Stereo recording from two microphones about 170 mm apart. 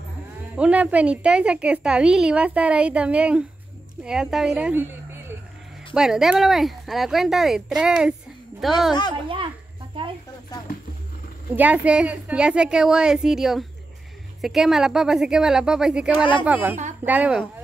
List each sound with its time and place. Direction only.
0.6 s a woman's voice: 10° right (ahead or behind)
9.9 s a sound: 30° right (ahead or behind)
11.5 s a woman's voice: 10° right (ahead or behind)